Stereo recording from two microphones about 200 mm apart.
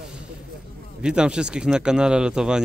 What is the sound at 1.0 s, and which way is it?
Speech, 5° right (ahead or behind).